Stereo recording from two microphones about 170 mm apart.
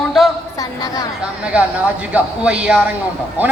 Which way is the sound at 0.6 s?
20° left (ahead or behind).